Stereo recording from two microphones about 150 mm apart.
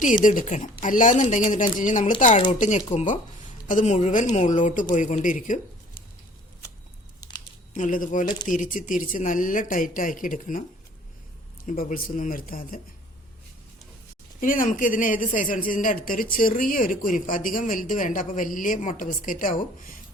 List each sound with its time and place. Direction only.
0.3 s a woman's voice: 55° left (ahead or behind)
7.7 s a woman's voice: 60° left (ahead or behind)
11.6 s speech: 60° left (ahead or behind)
14.4 s a woman's voice: 65° left (ahead or behind)